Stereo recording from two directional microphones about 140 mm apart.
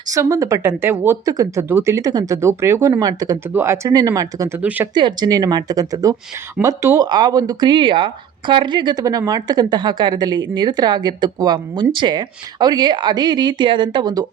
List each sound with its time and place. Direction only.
0.1 s speech: 25° right (ahead or behind)
4.9 s speech: 30° right (ahead or behind)